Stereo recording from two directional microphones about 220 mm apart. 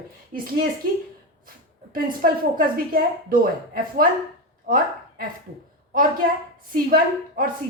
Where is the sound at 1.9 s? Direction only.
40° right (ahead or behind).